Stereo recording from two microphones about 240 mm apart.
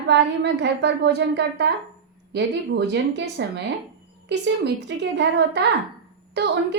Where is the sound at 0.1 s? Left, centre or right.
Right.